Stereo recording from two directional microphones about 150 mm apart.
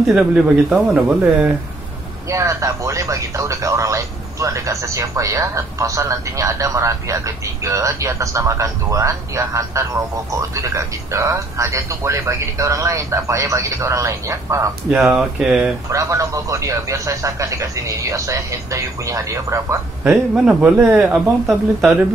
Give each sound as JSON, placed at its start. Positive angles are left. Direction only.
{"t": 0.0, "sound": "speech", "side_deg": -5}
{"t": 2.2, "sound": "speech", "side_deg": -20}
{"t": 14.9, "sound": "speech", "side_deg": -5}
{"t": 15.9, "sound": "speech", "side_deg": -20}
{"t": 21.0, "sound": "speech", "side_deg": 0}